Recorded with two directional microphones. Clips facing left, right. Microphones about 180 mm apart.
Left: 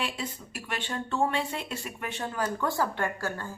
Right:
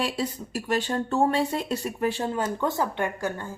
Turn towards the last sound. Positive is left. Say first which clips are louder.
# right 3 dB
turn(degrees=-20)  # may be behind; listen again after turning